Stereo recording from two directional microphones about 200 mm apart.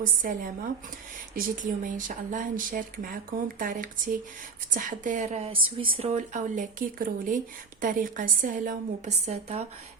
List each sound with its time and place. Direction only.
0.0 s a woman's voice: 45° right (ahead or behind)